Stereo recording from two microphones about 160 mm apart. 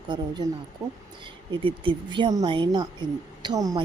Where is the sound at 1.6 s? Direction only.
30° right (ahead or behind).